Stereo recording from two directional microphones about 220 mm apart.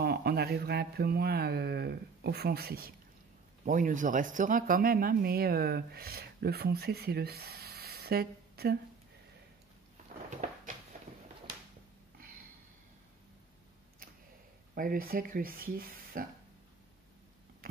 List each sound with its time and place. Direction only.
0.0 s speech: 45° right (ahead or behind)
14.8 s speech: 40° right (ahead or behind)